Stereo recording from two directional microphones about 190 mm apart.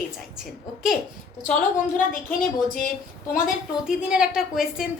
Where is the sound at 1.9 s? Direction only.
45° left (ahead or behind).